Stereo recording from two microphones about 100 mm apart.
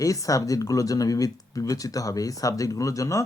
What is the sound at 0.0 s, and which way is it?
Speech, 35° left (ahead or behind).